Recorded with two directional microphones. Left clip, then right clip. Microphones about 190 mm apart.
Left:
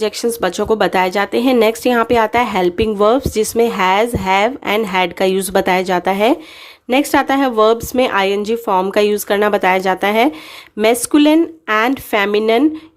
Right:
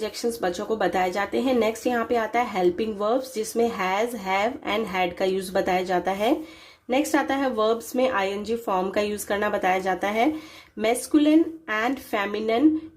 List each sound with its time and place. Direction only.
0.0 s speech: 35° left (ahead or behind)